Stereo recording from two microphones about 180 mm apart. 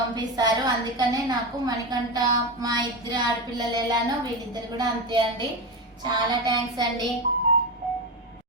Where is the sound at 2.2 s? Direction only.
20° right (ahead or behind).